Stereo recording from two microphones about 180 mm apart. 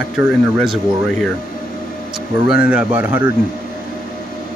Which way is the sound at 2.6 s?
10° right (ahead or behind).